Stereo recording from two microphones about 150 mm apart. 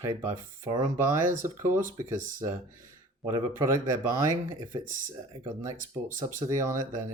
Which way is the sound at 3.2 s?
25° right (ahead or behind).